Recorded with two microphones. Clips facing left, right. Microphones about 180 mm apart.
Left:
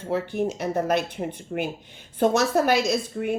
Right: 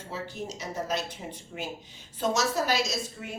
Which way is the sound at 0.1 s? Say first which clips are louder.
Left 12 dB; 60° left (ahead or behind).